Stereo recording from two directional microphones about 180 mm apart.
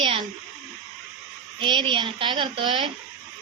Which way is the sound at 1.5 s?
25° right (ahead or behind).